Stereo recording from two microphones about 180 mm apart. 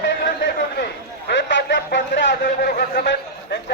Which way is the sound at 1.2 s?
75° left (ahead or behind).